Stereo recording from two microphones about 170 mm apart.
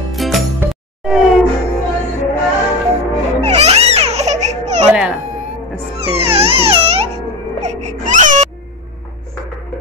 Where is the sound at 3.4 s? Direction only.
40° right (ahead or behind).